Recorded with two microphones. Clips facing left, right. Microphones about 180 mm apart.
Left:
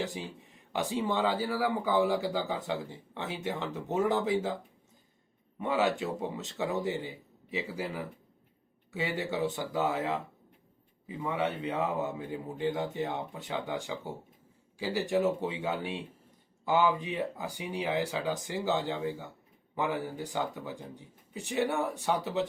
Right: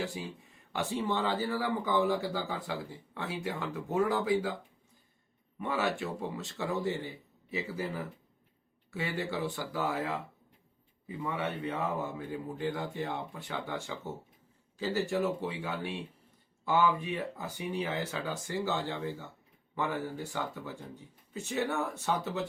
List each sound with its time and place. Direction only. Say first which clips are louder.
0.7 s speech: left 2 dB; 15° left (ahead or behind)
5.5 s speech: left 3 dB; 20° left (ahead or behind)